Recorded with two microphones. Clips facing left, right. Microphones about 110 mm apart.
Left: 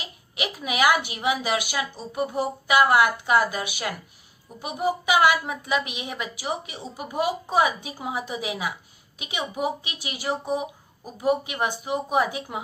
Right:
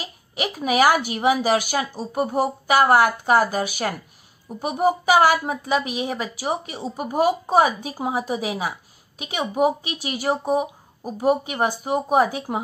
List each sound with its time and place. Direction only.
0.0 s a woman's voice: 40° right (ahead or behind)